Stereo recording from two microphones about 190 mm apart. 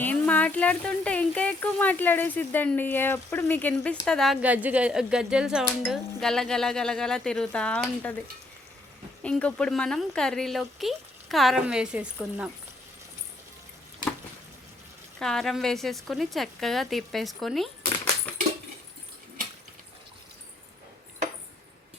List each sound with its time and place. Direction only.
0.0 s speech: 5° left (ahead or behind)
9.2 s speech: 5° left (ahead or behind)
15.2 s speech: 5° left (ahead or behind)